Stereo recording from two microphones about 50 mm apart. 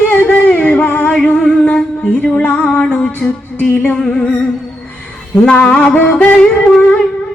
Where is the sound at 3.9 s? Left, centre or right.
Centre.